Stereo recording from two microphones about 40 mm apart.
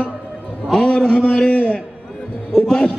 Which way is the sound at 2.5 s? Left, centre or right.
Centre.